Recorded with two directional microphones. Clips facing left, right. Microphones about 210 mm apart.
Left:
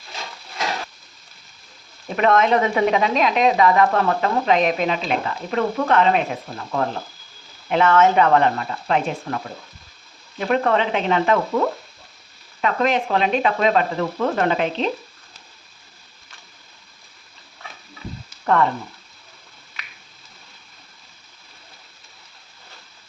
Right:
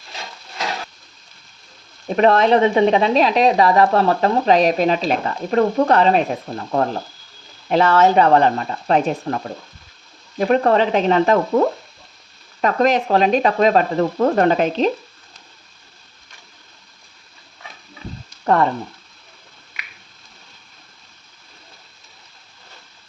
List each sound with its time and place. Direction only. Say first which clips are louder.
2.1 s speech: right 3 dB; 35° right (ahead or behind)
7.7 s speech: right 2 dB; 35° right (ahead or behind)
18.4 s frying: right 2 dB; 35° right (ahead or behind)